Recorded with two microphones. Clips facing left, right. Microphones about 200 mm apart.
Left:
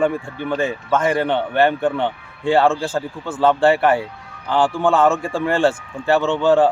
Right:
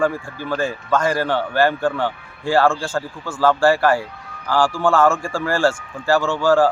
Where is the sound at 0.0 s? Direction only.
20° left (ahead or behind).